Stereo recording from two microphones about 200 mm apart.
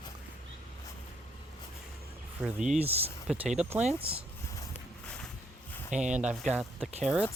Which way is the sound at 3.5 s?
5° right (ahead or behind).